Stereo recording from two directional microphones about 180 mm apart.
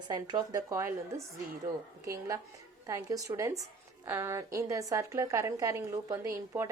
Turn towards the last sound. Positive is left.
turn(degrees=-15)  # may be behind; listen again after turning